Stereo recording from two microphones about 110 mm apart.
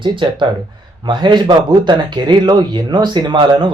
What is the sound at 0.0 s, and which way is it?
Speech, 45° right (ahead or behind).